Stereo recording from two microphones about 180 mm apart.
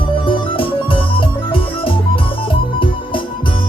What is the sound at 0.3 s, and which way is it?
Music, 30° left (ahead or behind).